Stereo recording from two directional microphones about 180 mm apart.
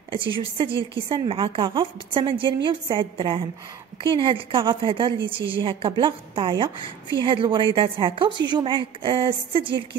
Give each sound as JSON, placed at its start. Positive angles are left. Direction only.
{"t": 0.1, "sound": "a woman's voice", "side_deg": -30}